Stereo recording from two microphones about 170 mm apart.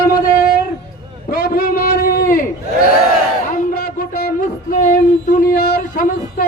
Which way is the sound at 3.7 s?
65° left (ahead or behind).